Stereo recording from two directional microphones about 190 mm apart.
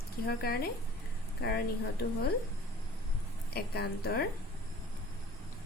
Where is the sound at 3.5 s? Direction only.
55° left (ahead or behind).